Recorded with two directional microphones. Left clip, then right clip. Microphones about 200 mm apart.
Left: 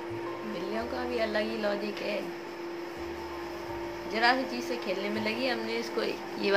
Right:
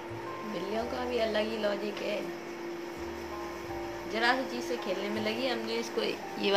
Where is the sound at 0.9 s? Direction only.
10° right (ahead or behind).